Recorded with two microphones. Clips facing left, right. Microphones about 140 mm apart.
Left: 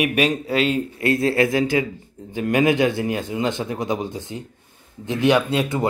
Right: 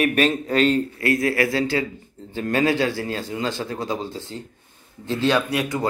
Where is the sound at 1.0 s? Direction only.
25° left (ahead or behind).